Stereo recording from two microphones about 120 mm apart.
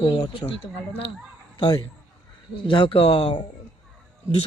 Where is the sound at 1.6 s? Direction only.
35° left (ahead or behind).